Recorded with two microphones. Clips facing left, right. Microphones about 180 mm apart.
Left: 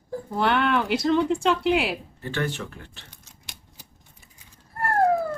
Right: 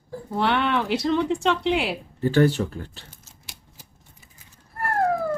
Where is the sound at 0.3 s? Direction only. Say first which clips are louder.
Even; centre (ahead or behind).